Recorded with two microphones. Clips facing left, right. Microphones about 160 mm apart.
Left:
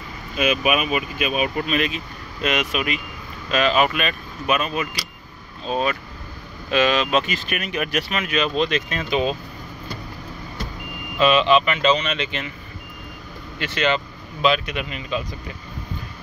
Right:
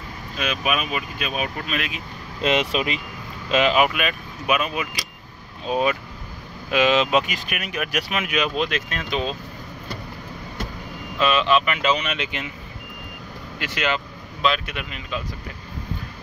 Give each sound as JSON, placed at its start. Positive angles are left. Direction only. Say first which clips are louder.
{"t": 0.4, "sound": "speech", "louder": "left 5 dB", "side_deg": 5}
{"t": 1.9, "sound": "speech", "louder": "left 3 dB", "side_deg": -20}
{"t": 11.1, "sound": "speech", "louder": "left 3 dB", "side_deg": 0}
{"t": 13.6, "sound": "speech", "louder": "left 3 dB", "side_deg": -5}